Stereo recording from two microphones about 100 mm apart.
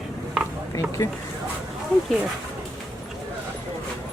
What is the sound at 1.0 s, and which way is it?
Speech, 40° left (ahead or behind).